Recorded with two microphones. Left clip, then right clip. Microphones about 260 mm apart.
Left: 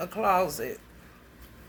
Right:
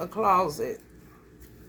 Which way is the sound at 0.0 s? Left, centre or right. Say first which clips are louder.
Right 2 dB; centre.